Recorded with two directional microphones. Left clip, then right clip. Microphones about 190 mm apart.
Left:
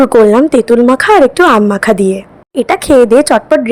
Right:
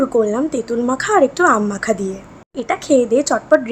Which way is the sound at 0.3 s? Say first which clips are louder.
Left 12 dB; 45° left (ahead or behind).